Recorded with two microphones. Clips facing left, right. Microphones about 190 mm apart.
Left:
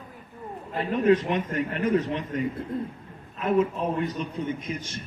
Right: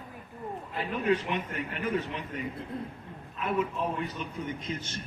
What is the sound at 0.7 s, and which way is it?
A man's voice, 40° left (ahead or behind).